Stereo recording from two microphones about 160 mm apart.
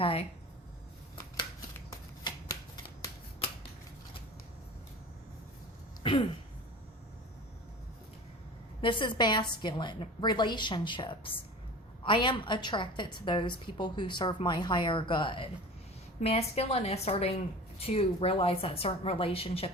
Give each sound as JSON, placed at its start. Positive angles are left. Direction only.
{"t": 0.0, "sound": "a woman's voice", "side_deg": 35}
{"t": 1.7, "sound": "shuffling cards", "side_deg": 20}
{"t": 6.0, "sound": "a sound", "side_deg": 30}
{"t": 8.8, "sound": "a woman's voice", "side_deg": 30}